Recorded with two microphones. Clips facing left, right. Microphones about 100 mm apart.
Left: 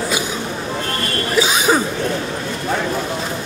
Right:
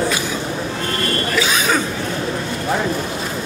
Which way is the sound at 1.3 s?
30° left (ahead or behind).